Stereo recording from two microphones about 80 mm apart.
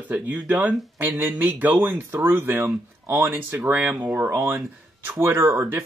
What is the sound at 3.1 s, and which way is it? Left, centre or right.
A man's voice, right.